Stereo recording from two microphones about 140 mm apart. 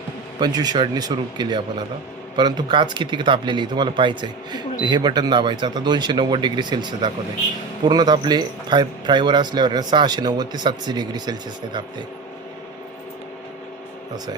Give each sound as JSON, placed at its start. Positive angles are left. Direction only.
{"t": 0.3, "sound": "speech", "side_deg": -30}